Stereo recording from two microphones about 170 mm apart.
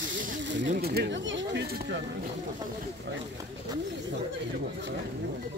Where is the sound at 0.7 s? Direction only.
65° right (ahead or behind); by 2.0 s 85° right.